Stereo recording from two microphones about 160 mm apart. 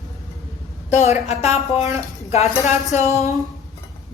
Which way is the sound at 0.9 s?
45° left (ahead or behind).